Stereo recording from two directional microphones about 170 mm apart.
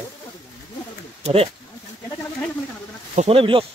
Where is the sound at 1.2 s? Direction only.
35° right (ahead or behind).